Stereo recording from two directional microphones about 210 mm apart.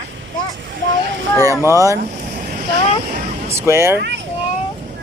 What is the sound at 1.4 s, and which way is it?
Speech, 15° right (ahead or behind).